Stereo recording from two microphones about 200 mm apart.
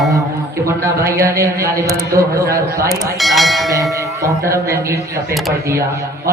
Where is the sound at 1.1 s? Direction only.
15° right (ahead or behind).